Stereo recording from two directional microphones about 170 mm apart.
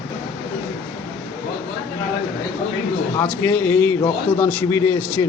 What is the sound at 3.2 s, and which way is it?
A man's voice, 10° left (ahead or behind).